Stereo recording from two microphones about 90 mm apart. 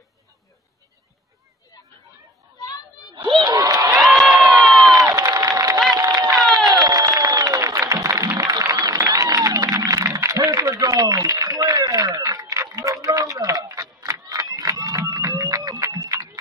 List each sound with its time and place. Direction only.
3.2 s crowd: 60° right (ahead or behind); by 3.9 s 45° right (ahead or behind)
3.9 s crowd: centre (ahead or behind)
4.5 s crowd: 45° right (ahead or behind)
5.9 s a sound: 45° right (ahead or behind)
6.5 s music: 50° right (ahead or behind)
12.1 s a sound: 40° right (ahead or behind)